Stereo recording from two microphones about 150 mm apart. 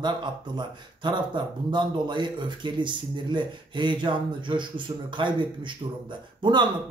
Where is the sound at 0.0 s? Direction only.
30° right (ahead or behind).